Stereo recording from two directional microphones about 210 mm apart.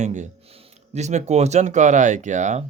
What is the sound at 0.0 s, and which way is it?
Speech, 35° right (ahead or behind).